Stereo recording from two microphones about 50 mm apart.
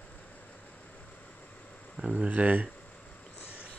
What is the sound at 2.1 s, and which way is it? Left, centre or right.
Speech, right.